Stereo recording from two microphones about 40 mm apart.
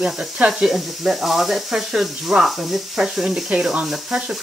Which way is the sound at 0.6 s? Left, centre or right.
Centre.